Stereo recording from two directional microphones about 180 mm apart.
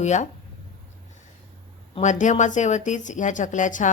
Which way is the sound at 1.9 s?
40° left (ahead or behind).